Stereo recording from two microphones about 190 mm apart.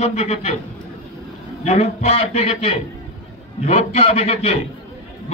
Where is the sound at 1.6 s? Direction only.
35° left (ahead or behind).